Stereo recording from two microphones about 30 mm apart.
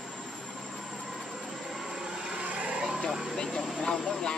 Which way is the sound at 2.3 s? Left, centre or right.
Right.